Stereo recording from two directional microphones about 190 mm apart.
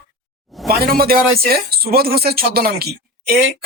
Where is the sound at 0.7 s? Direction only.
50° right (ahead or behind).